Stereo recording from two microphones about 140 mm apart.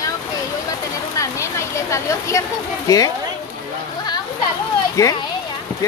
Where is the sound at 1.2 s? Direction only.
20° left (ahead or behind).